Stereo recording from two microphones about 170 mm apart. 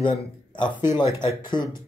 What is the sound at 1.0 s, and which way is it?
Speech, 15° right (ahead or behind).